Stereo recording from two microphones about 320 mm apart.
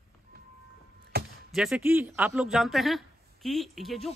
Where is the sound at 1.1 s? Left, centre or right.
Right.